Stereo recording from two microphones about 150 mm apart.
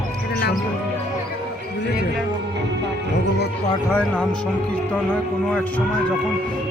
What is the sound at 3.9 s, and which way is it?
Speech, 10° left (ahead or behind).